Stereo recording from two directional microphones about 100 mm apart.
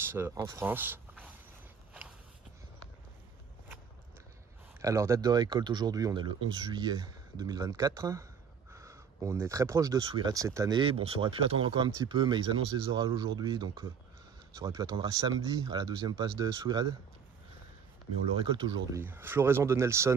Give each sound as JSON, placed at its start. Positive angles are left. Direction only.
{"t": 0.0, "sound": "speech", "side_deg": -25}
{"t": 4.8, "sound": "speech", "side_deg": -30}
{"t": 5.3, "sound": "speech", "side_deg": -50}
{"t": 10.7, "sound": "speech", "side_deg": -60}
{"t": 18.4, "sound": "speech", "side_deg": -50}
{"t": 18.9, "sound": "speech", "side_deg": -25}